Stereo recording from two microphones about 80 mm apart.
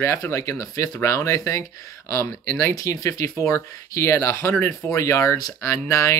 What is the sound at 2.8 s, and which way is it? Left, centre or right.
Speech, left.